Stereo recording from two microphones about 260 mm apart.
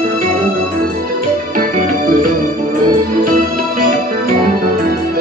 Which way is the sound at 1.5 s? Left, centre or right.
Right.